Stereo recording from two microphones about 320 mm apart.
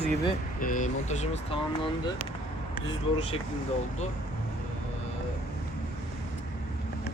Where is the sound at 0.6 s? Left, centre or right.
Left.